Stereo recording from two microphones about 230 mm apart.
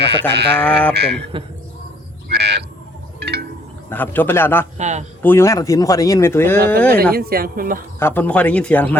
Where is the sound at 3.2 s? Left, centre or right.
Right.